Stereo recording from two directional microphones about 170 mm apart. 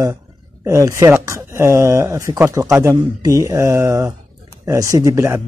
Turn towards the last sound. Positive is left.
turn(degrees=-15)  # may be behind; listen again after turning